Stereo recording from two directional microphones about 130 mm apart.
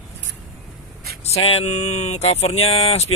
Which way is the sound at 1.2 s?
50° left (ahead or behind).